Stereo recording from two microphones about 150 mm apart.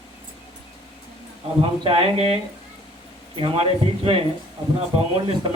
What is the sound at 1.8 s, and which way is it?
A man's voice, 40° right (ahead or behind).